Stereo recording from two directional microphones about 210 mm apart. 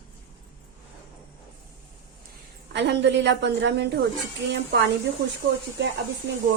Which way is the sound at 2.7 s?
55° right (ahead or behind).